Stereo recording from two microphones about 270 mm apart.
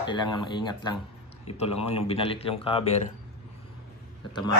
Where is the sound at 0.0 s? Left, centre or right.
Centre.